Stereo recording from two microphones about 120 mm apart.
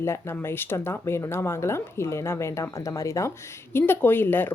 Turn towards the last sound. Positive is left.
turn(degrees=15)  # may be behind; listen again after turning